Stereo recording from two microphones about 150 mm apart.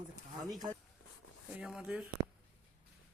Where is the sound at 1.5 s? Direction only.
5° right (ahead or behind).